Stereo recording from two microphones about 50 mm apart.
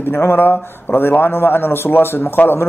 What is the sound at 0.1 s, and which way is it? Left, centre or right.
A man's voice, left.